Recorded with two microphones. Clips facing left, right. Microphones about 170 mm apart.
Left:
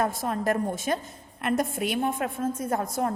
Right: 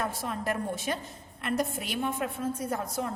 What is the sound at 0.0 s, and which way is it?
A woman's voice, 45° left (ahead or behind).